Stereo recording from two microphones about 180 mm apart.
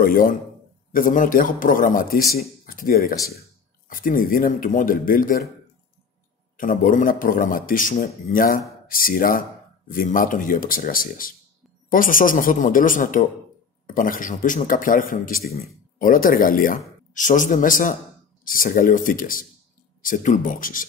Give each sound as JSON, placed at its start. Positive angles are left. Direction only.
{"t": 0.0, "sound": "speech", "side_deg": 50}
{"t": 6.5, "sound": "speech", "side_deg": 50}